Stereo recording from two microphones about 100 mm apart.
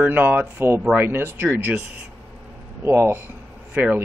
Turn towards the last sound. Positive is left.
turn(degrees=-15)  # may be behind; listen again after turning